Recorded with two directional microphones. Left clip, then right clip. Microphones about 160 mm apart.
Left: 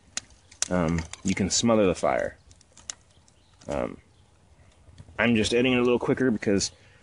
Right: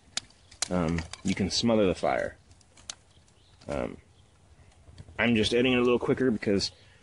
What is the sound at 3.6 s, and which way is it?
Speech, 50° left (ahead or behind).